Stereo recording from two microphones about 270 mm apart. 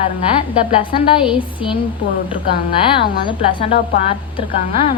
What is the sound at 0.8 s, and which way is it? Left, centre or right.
A woman's voice, centre.